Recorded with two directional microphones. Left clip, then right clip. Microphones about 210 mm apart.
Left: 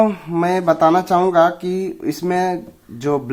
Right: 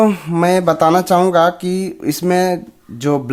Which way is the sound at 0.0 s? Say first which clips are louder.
Right 3 dB; 45° right (ahead or behind).